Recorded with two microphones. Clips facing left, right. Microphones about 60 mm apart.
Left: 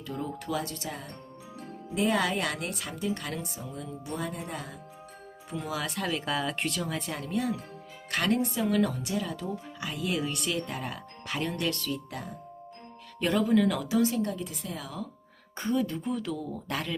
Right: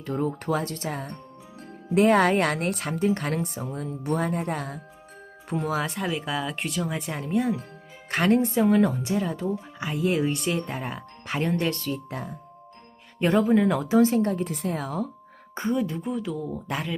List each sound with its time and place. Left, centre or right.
0.0 s speech: right
5.5 s speech: right
6.0 s a woman's voice: centre
6.8 s a woman's voice: centre; by 15.1 s right
15.5 s a woman's voice: right